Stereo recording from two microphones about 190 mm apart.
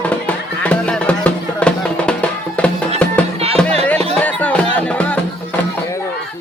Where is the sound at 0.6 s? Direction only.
5° left (ahead or behind).